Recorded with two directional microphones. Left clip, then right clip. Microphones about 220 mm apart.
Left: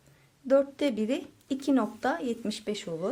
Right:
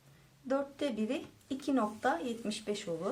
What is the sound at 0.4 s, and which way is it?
Speech, 40° left (ahead or behind).